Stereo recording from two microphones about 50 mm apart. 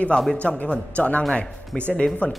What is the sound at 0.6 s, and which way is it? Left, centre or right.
A woman's voice, left.